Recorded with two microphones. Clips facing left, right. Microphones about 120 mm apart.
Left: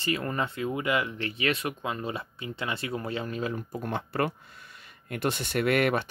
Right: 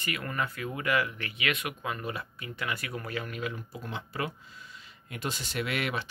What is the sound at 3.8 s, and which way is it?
Speech, 55° left (ahead or behind).